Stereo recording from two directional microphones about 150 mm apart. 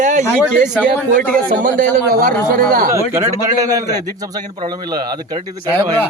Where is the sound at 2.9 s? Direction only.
20° right (ahead or behind).